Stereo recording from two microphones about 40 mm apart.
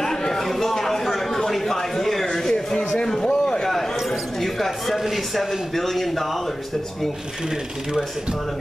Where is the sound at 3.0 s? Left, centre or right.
Centre.